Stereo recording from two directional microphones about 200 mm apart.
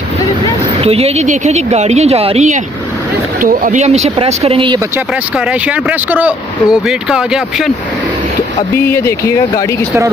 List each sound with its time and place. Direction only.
0.7 s a woman's voice: 30° right (ahead or behind)
4.7 s speech: 10° right (ahead or behind)
8.7 s speech: 15° left (ahead or behind)